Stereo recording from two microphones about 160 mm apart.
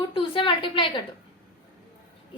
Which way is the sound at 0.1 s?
35° left (ahead or behind).